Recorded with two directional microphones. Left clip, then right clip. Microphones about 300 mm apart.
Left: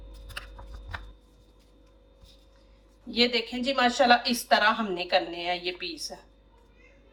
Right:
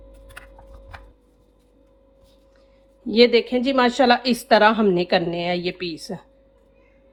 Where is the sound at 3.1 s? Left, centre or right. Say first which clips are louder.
Right 10 dB; right.